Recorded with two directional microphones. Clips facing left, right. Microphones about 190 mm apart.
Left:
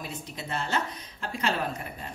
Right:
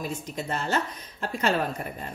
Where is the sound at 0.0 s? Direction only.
45° right (ahead or behind).